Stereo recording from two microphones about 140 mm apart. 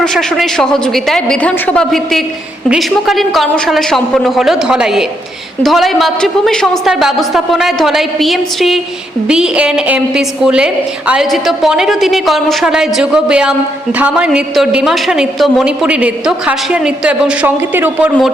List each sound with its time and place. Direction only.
0.0 s a woman's voice: 5° left (ahead or behind); by 18.1 s 15° right (ahead or behind)